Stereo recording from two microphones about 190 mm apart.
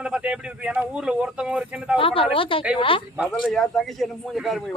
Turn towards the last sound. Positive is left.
turn(degrees=0)  # may be behind; listen again after turning